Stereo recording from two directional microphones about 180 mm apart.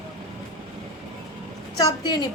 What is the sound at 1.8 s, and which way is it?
Speech, 20° left (ahead or behind).